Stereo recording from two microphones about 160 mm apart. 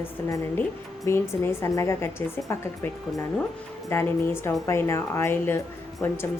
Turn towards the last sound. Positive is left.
turn(degrees=10)  # may be behind; listen again after turning